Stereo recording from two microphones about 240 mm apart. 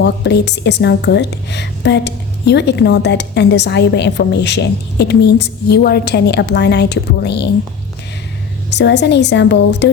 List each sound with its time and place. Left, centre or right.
0.0 s a woman's voice: left
8.7 s a woman's voice: left